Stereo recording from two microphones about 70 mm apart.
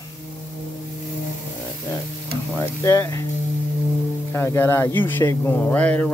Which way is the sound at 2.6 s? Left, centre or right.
Left.